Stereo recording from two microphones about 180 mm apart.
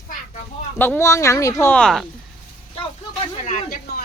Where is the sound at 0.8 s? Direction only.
10° left (ahead or behind).